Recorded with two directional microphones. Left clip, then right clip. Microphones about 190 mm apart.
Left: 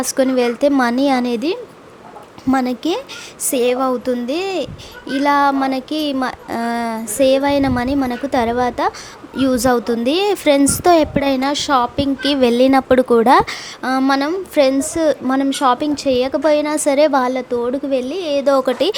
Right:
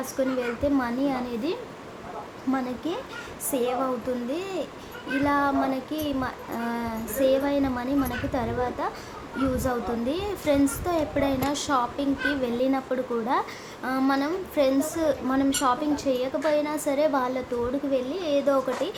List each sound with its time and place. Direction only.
0.0 s a woman's voice: 55° left (ahead or behind)